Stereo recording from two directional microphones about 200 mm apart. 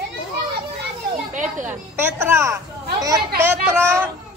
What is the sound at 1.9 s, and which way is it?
A child's voice, 10° right (ahead or behind).